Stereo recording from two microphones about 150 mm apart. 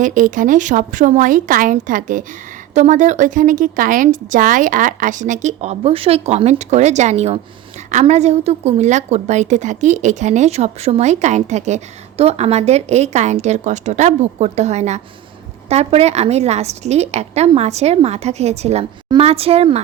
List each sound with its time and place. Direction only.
0.0 s a woman's voice: 60° right (ahead or behind); by 19.8 s 40° right (ahead or behind)